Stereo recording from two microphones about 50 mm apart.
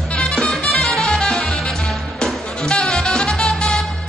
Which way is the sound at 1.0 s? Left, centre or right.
Centre.